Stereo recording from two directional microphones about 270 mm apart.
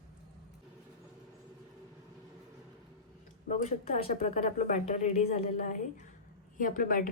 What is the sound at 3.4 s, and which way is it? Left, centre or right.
A woman's voice, left.